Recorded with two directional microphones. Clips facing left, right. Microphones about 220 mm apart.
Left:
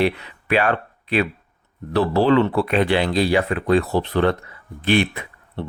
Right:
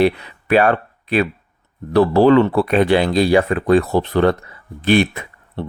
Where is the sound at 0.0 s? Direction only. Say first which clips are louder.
Right 5 dB; 45° right (ahead or behind).